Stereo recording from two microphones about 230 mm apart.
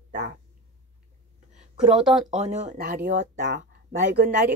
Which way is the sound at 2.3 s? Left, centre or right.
Right.